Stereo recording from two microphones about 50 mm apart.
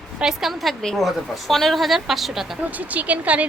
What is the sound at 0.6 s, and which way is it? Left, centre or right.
A woman's voice, centre.